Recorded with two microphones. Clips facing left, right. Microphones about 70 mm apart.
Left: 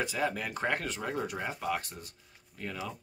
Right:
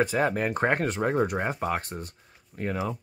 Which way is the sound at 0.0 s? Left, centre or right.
Right.